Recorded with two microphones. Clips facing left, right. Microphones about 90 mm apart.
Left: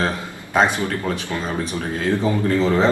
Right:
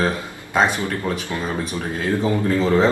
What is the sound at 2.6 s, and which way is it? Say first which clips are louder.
Speech: right 1 dB; 5° right (ahead or behind).